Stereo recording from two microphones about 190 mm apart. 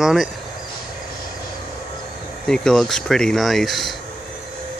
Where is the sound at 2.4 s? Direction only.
5° left (ahead or behind).